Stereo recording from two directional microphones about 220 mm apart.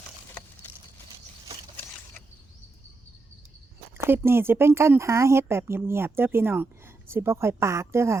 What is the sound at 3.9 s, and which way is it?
Speech, 10° right (ahead or behind).